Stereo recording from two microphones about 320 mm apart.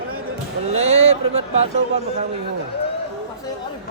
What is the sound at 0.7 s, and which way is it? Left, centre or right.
Speech, centre.